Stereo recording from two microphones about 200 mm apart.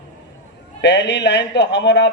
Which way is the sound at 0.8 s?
60° left (ahead or behind).